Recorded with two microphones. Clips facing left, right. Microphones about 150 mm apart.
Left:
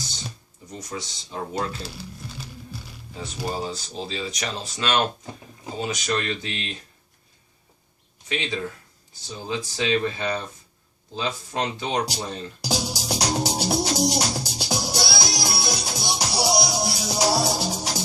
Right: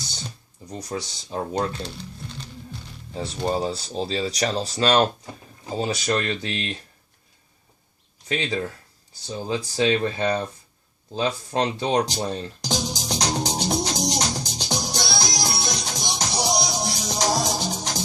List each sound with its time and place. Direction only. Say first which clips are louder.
0.7 s speech: right 3 dB; 35° right (ahead or behind)
1.8 s music: right 2 dB; 5° left (ahead or behind)
3.1 s speech: right 5 dB; 35° right (ahead or behind)
8.3 s speech: right 2 dB; 40° right (ahead or behind)
12.6 s music: left 1 dB; 5° left (ahead or behind)